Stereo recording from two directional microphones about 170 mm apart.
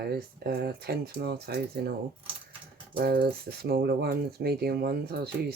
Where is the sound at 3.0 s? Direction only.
65° right (ahead or behind).